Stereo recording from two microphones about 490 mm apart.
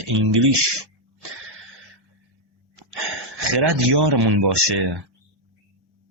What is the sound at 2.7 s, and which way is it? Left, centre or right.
Speech, right.